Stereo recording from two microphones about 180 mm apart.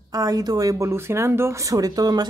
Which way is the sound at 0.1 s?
20° right (ahead or behind).